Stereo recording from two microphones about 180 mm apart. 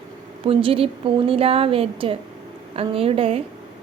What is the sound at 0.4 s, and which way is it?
A woman's voice, 30° right (ahead or behind).